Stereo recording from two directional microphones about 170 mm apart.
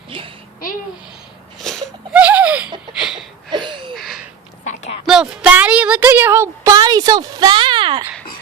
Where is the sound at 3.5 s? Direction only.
25° right (ahead or behind).